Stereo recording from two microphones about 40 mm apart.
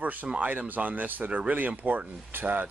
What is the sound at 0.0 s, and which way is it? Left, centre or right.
Speech, right.